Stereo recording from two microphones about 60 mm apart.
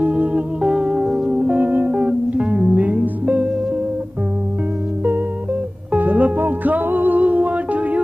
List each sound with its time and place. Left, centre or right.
0.0 s music: right
1.6 s music: right
2.0 s music: centre
5.9 s music: right